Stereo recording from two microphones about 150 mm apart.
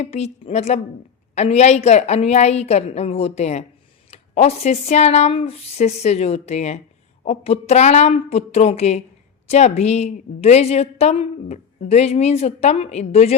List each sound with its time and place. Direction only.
0.0 s a woman's voice: 45° left (ahead or behind)